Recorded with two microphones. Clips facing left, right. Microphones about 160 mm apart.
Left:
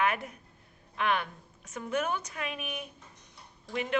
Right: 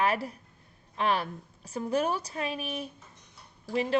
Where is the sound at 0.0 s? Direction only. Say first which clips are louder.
Right 2 dB; 35° right (ahead or behind).